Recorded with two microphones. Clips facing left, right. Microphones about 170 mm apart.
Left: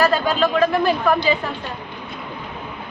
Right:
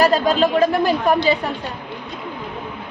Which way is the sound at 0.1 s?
35° right (ahead or behind).